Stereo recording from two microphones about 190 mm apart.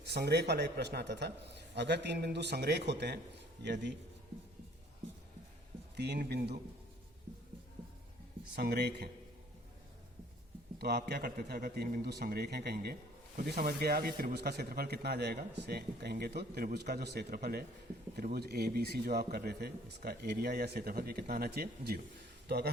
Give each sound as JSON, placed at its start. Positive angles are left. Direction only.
{"t": 0.0, "sound": "a man's voice", "side_deg": -65}
{"t": 6.0, "sound": "a man's voice", "side_deg": -60}
{"t": 8.5, "sound": "a man's voice", "side_deg": -60}
{"t": 10.8, "sound": "a man's voice", "side_deg": -55}